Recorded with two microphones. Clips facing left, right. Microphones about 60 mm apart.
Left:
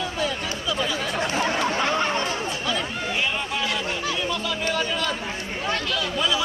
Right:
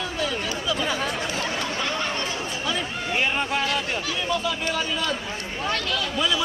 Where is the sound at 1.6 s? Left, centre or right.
Left.